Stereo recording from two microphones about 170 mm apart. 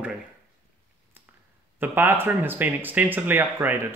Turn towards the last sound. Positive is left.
turn(degrees=-10)  # may be behind; listen again after turning